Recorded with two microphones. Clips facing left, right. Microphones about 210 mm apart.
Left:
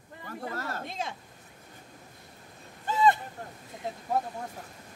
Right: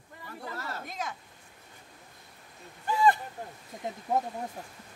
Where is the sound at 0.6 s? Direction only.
50° left (ahead or behind).